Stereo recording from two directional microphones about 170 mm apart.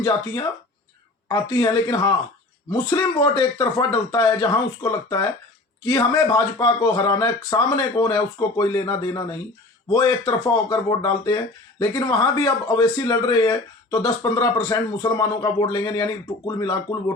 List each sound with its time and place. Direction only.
1.3 s speech: 20° left (ahead or behind)